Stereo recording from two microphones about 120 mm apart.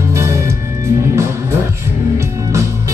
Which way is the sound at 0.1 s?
25° right (ahead or behind).